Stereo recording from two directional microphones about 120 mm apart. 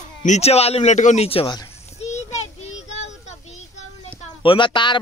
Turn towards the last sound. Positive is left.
turn(degrees=40)  # may be behind; listen again after turning